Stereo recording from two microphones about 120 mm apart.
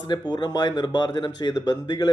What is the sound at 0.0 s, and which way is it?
A man's voice, 35° left (ahead or behind).